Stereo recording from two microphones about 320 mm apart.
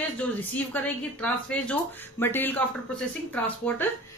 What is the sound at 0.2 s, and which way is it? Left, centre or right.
Speech, centre.